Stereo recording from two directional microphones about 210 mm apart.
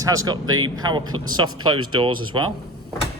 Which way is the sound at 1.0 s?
85° right.